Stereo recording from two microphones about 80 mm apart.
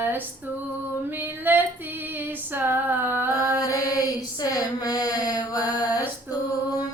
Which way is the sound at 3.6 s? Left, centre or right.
Left.